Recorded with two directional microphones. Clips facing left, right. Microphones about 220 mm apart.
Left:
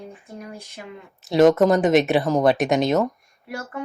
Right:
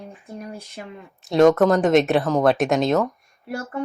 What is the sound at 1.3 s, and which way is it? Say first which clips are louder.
Speech: even; centre (ahead or behind).